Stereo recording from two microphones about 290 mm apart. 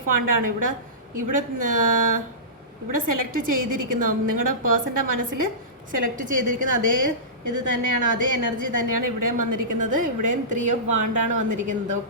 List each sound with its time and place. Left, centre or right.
0.1 s a woman's voice: right